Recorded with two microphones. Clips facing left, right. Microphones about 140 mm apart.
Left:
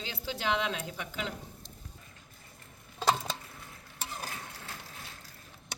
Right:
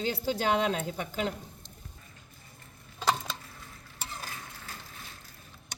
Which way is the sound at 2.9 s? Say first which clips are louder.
Left 1 dB; 30° left (ahead or behind).